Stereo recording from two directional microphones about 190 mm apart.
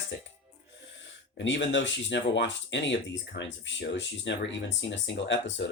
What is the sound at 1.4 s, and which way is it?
Speech, 70° left (ahead or behind).